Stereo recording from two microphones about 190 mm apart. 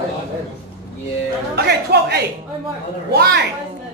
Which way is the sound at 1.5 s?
60° right (ahead or behind).